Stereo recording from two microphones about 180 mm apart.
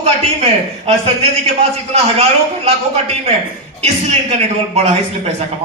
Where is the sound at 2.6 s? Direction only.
35° right (ahead or behind).